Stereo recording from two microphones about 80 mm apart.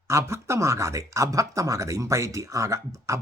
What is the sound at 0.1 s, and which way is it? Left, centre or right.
Speech, right.